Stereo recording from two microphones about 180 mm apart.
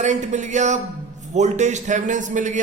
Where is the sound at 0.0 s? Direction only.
40° right (ahead or behind).